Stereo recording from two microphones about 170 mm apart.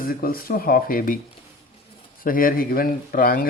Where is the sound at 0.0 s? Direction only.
55° left (ahead or behind).